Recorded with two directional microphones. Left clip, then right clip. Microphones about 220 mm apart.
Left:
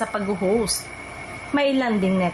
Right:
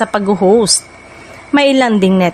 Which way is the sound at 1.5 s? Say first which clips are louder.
Right 10 dB; 45° right (ahead or behind).